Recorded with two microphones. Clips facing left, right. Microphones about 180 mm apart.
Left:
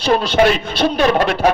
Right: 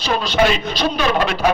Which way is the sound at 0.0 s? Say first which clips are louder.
Left 4 dB; 55° left (ahead or behind).